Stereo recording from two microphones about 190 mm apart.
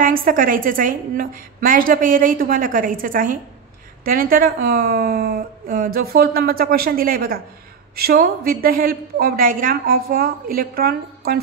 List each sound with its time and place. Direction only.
0.0 s a woman's voice: 50° right (ahead or behind)